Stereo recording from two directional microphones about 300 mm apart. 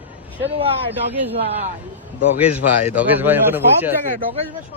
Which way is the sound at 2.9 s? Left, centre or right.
Centre.